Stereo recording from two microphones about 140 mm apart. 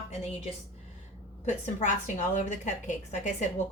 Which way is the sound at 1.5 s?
60° left (ahead or behind).